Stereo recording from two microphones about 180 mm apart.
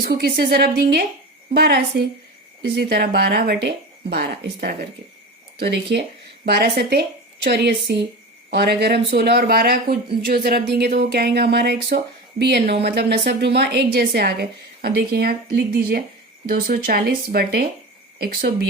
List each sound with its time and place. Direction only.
0.1 s a woman's voice: 65° right (ahead or behind)